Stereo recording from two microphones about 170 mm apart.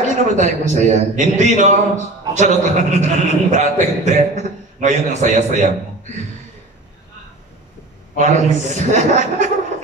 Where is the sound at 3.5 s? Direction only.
45° right (ahead or behind).